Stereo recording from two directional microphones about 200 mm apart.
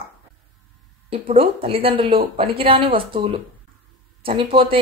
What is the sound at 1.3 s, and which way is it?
Speech, 30° right (ahead or behind).